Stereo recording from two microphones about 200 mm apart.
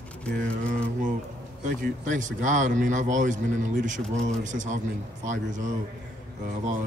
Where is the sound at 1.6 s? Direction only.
40° right (ahead or behind).